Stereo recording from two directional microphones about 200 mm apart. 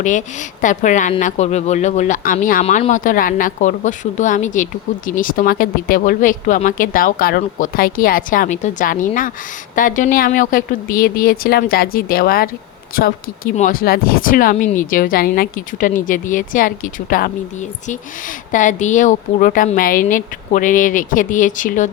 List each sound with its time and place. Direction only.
0.0 s speech: 40° left (ahead or behind)